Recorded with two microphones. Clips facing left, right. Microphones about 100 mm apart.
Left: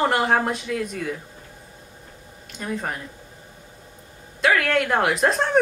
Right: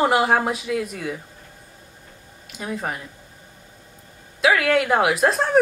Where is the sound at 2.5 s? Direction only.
5° right (ahead or behind).